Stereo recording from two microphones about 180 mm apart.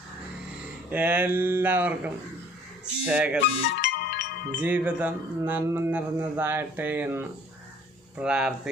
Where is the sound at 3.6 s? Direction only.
70° left (ahead or behind).